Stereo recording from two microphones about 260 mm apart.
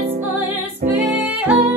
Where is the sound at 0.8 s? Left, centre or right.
Right.